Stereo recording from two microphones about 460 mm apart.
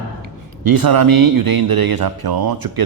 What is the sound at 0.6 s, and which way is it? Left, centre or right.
Speech, right.